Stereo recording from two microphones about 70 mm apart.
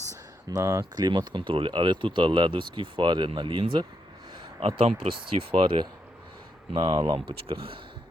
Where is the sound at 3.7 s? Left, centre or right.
Right.